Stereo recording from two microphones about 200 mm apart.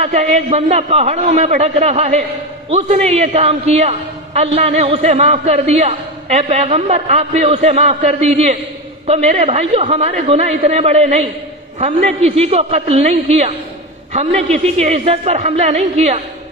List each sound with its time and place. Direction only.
0.0 s a man's voice: 35° right (ahead or behind)